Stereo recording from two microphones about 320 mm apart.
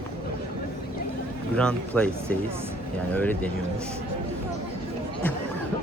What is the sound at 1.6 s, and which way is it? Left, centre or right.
Speech, centre.